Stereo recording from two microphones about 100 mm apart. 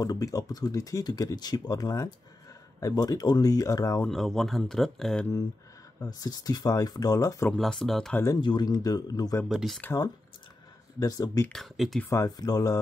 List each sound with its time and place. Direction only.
0.0 s speech: 40° left (ahead or behind)
4.1 s speech: 5° left (ahead or behind)
5.9 s speech: 40° left (ahead or behind)
7.5 s speech: 5° left (ahead or behind)
8.4 s speech: 50° left (ahead or behind)
9.5 s speech: 5° right (ahead or behind)
11.0 s speech: 35° left (ahead or behind)
11.5 s speech: centre (ahead or behind)
12.1 s speech: 35° left (ahead or behind)